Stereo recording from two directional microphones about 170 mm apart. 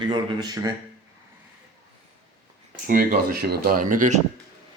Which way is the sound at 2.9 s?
60° right (ahead or behind).